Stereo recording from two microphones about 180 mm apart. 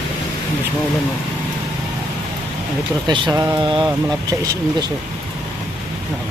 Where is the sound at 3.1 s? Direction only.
20° right (ahead or behind).